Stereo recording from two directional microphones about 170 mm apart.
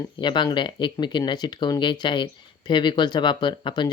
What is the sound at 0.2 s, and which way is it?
A man's voice, 25° left (ahead or behind).